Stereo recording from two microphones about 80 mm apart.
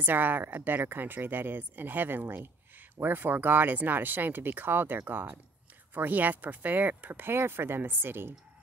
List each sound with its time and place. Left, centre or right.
0.0 s speech: right